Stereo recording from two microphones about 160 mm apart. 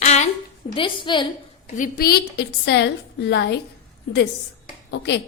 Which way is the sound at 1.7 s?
60° left (ahead or behind).